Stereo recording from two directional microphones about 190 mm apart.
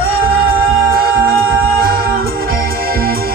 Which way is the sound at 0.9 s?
50° right (ahead or behind).